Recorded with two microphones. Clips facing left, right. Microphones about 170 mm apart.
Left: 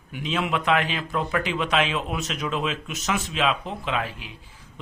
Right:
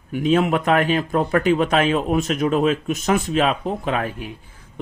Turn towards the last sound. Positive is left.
turn(degrees=-50)  # may be behind; listen again after turning